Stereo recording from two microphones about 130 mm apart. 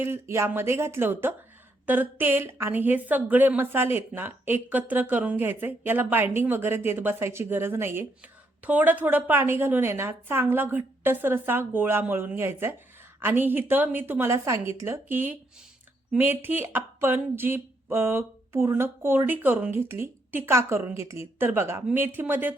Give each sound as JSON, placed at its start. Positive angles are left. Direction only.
{"t": 0.0, "sound": "a woman's voice", "side_deg": -20}